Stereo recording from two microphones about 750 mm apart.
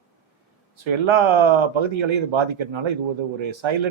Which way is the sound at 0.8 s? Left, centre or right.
Right.